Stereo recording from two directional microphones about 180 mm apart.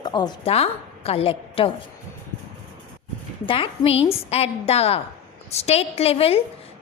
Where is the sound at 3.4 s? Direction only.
30° left (ahead or behind).